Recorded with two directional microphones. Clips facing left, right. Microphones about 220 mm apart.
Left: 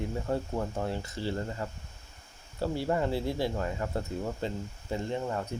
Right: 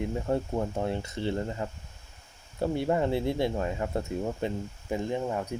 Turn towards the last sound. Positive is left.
turn(degrees=-15)  # may be behind; listen again after turning